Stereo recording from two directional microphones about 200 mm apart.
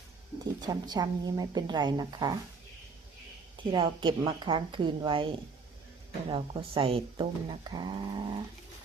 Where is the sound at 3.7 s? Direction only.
25° right (ahead or behind).